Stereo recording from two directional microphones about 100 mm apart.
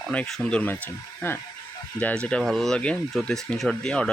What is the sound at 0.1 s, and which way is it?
Speech, 10° left (ahead or behind).